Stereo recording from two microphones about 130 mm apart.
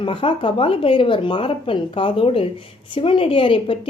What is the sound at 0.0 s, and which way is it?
A woman's voice, 40° left (ahead or behind).